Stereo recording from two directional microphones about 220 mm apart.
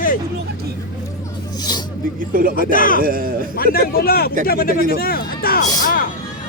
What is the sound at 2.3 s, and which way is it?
Speech, 40° right (ahead or behind).